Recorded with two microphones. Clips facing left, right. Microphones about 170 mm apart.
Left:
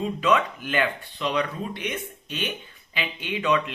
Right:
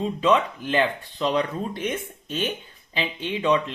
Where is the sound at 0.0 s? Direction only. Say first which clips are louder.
Right 2 dB; 30° right (ahead or behind).